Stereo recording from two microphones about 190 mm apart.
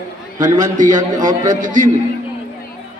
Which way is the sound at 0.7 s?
40° right (ahead or behind).